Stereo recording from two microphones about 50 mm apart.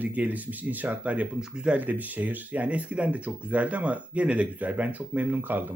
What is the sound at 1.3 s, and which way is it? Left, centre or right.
Speech, centre.